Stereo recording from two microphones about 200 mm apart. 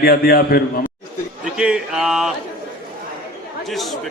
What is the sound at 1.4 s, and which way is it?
Speech, 5° right (ahead or behind).